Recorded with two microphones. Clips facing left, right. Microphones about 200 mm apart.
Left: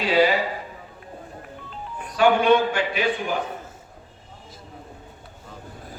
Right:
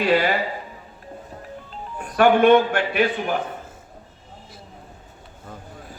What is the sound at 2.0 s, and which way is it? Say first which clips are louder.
A man's voice: right 3 dB; 55° right (ahead or behind).